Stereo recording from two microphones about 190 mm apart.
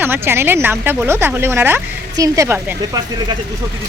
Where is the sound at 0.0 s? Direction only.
10° right (ahead or behind).